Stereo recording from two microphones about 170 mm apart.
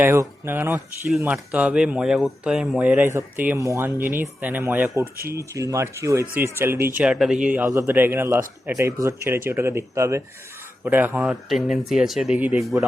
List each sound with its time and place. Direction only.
0.0 s speech: 15° right (ahead or behind)